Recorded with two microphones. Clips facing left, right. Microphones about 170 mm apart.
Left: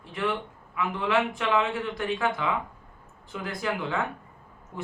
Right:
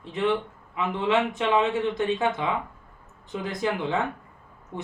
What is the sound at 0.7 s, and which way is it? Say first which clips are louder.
A man's voice: right 2 dB; 25° right (ahead or behind).